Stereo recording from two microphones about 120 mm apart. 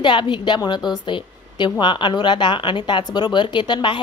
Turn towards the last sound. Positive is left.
turn(degrees=40)  # may be behind; listen again after turning